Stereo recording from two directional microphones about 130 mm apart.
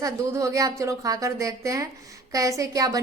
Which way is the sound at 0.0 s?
25° right (ahead or behind).